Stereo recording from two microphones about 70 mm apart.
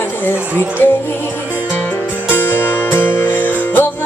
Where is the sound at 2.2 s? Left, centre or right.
Left.